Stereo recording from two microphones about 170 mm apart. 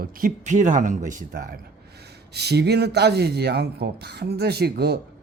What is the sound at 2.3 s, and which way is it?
Speech, 75° right (ahead or behind).